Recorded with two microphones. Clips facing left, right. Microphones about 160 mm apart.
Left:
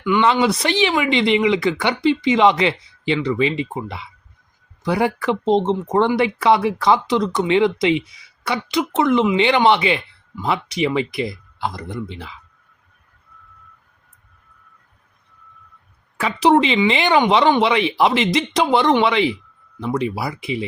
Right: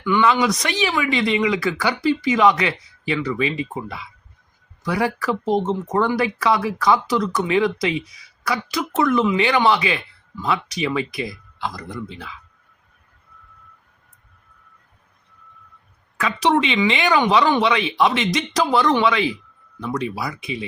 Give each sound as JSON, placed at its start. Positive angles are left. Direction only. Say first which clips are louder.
{"t": 0.0, "sound": "speech", "louder": "left 1 dB", "side_deg": 15}
{"t": 0.3, "sound": "speech", "louder": "left 2 dB", "side_deg": 30}
{"t": 16.1, "sound": "speech", "louder": "left 4 dB", "side_deg": 30}